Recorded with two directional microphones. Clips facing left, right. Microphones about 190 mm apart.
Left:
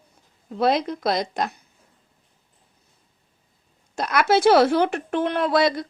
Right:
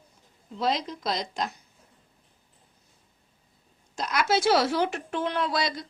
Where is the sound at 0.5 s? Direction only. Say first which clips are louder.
Left 7 dB; 60° left (ahead or behind).